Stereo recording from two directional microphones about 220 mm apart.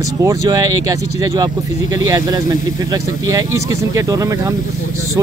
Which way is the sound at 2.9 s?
15° right (ahead or behind).